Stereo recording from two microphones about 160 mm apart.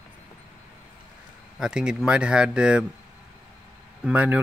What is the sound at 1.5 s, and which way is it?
Speech, 5° right (ahead or behind).